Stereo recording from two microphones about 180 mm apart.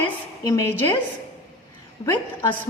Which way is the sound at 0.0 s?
20° left (ahead or behind).